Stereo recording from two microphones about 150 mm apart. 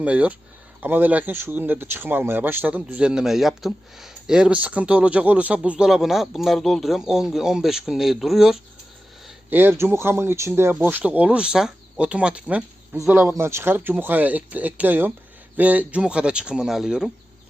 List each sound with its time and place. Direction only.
0.0 s a man's voice: 10° right (ahead or behind)
9.5 s speech: 15° right (ahead or behind)